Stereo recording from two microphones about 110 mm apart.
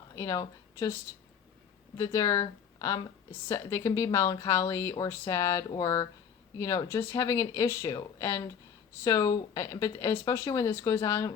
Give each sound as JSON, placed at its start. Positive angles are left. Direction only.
{"t": 0.2, "sound": "speech", "side_deg": 30}
{"t": 2.0, "sound": "speech", "side_deg": 30}